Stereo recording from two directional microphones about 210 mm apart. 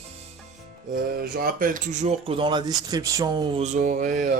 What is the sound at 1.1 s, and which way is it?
Speech, 45° right (ahead or behind).